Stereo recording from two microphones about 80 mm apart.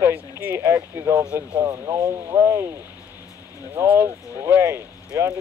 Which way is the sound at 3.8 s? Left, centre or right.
Right.